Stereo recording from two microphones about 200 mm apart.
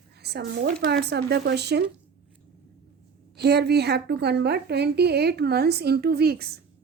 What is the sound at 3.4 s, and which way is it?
Speech, 55° right (ahead or behind).